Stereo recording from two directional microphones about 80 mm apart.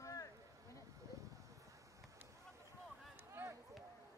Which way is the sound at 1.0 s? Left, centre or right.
Right.